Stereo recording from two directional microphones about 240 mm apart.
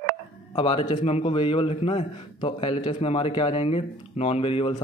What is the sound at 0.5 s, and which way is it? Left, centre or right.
Speech, centre.